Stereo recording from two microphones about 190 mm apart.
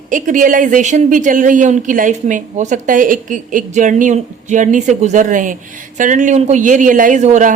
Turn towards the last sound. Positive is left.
turn(degrees=-40)  # may be behind; listen again after turning